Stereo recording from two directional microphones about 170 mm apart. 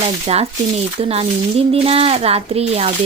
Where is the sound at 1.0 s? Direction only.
35° right (ahead or behind).